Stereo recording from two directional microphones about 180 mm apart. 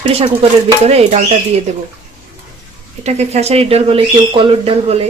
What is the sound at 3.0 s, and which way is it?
Speech, 40° right (ahead or behind).